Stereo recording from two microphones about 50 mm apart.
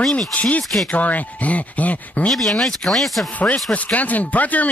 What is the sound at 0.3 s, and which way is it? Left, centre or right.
Speech, left.